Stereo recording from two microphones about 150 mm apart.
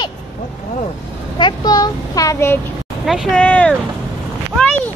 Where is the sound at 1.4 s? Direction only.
30° left (ahead or behind).